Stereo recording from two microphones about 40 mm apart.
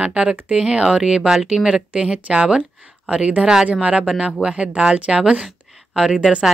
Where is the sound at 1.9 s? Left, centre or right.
Right.